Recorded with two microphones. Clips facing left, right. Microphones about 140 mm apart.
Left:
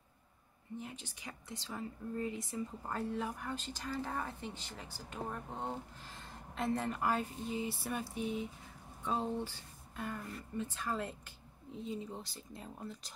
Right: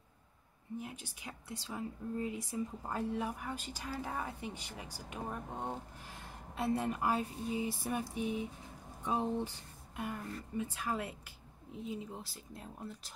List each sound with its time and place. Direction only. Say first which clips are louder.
0.7 s speech: right 2 dB; 10° right (ahead or behind)